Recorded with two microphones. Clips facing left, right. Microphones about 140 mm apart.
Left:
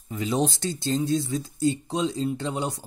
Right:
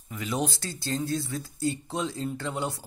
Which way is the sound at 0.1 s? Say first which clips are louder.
Left 5 dB; 25° left (ahead or behind).